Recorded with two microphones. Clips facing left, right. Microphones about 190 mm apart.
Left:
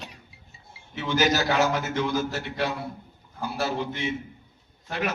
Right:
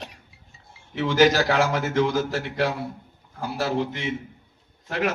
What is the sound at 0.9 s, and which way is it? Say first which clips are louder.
A man's voice: right 5 dB; 90° right.